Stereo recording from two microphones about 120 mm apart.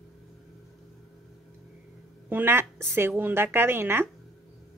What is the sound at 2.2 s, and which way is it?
A woman's voice, 15° right (ahead or behind).